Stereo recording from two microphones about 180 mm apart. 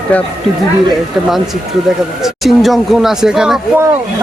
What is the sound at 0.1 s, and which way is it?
Speech, 5° left (ahead or behind).